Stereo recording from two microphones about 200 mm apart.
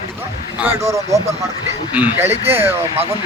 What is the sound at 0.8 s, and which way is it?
Speech, 15° right (ahead or behind).